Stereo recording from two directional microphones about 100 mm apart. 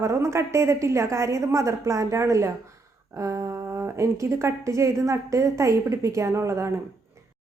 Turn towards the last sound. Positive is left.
turn(degrees=-30)  # may be behind; listen again after turning